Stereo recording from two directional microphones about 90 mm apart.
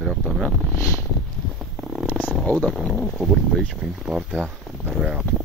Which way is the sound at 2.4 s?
10° left (ahead or behind).